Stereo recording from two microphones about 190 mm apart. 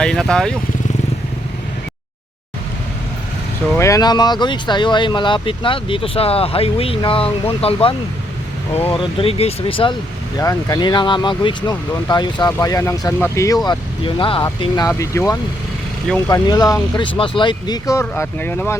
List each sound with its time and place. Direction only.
0.0 s speech: 5° left (ahead or behind)
3.8 s speech: 15° left (ahead or behind)
10.3 s speech: 15° left (ahead or behind)
13.7 s speech: 25° left (ahead or behind); by 18.8 s 10° left (ahead or behind)